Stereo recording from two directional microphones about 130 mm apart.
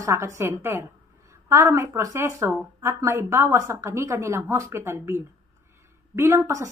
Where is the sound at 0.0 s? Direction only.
20° right (ahead or behind).